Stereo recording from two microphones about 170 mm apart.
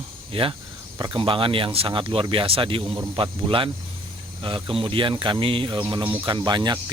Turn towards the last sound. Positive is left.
turn(degrees=-25)  # may be behind; listen again after turning